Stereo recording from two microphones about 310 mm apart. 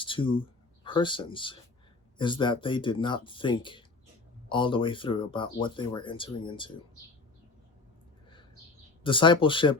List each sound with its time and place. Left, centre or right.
0.0 s a sound: centre
0.9 s speech: centre
9.0 s speech: centre